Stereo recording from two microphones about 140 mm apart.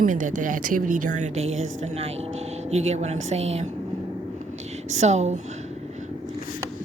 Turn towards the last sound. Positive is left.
turn(degrees=-55)  # may be behind; listen again after turning